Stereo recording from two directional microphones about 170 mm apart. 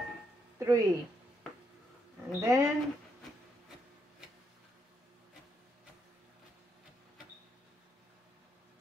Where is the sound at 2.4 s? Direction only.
20° right (ahead or behind).